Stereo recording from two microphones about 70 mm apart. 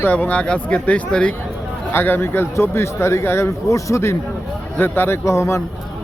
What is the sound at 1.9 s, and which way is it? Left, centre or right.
Speech, left.